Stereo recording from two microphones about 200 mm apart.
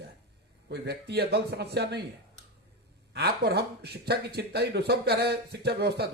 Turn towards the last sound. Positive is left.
turn(degrees=-55)  # may be behind; listen again after turning